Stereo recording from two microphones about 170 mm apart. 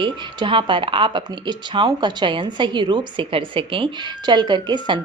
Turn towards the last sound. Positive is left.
turn(degrees=-25)  # may be behind; listen again after turning